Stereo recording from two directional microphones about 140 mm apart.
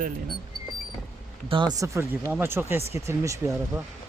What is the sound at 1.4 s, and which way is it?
Speech, 35° right (ahead or behind).